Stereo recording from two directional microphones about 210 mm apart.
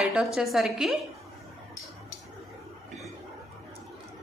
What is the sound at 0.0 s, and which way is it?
Speech, centre (ahead or behind).